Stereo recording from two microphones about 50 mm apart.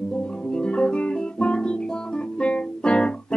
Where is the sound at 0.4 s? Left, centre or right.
Centre.